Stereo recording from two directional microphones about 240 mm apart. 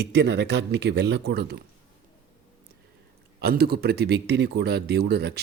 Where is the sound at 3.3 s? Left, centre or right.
Right.